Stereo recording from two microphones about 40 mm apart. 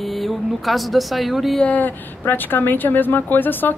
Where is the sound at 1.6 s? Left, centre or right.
Left.